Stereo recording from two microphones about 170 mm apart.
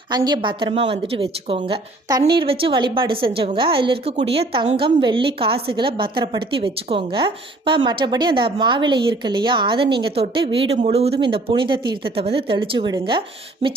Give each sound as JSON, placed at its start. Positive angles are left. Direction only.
{"t": 0.1, "sound": "a woman's voice", "side_deg": -25}